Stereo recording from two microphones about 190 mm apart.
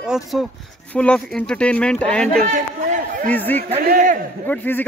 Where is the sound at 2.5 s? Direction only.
40° right (ahead or behind).